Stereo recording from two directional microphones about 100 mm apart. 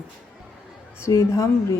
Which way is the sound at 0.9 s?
30° left (ahead or behind).